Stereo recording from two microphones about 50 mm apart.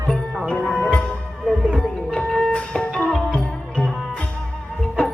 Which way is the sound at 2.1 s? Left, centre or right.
Centre.